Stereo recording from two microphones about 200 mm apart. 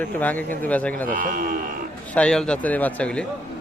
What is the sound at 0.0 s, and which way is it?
A man's voice, 10° left (ahead or behind).